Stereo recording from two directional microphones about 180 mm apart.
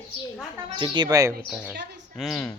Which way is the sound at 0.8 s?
20° right (ahead or behind).